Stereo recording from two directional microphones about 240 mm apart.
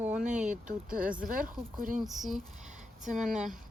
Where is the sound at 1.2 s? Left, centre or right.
Right.